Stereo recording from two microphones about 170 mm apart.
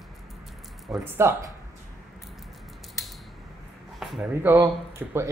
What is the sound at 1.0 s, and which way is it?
Speech, 15° right (ahead or behind).